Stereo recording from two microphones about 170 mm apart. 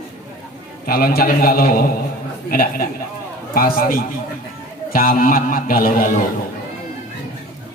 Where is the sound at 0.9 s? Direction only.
60° left (ahead or behind).